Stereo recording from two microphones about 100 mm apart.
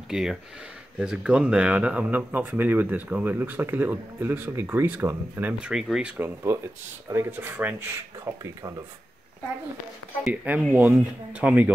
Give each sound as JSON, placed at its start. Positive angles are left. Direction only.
{"t": 0.1, "sound": "speech", "side_deg": -5}
{"t": 5.7, "sound": "speech", "side_deg": -5}
{"t": 6.1, "sound": "speech", "side_deg": -25}
{"t": 7.9, "sound": "speech", "side_deg": -35}
{"t": 10.3, "sound": "speech", "side_deg": -15}